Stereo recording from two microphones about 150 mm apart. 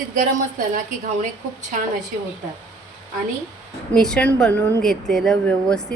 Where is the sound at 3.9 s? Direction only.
5° left (ahead or behind).